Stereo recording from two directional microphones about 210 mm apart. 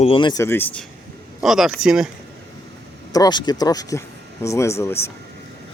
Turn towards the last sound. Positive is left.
turn(degrees=10)  # may be behind; listen again after turning